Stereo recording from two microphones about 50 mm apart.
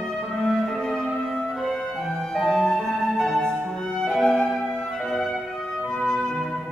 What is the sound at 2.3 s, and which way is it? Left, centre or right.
Flute, centre.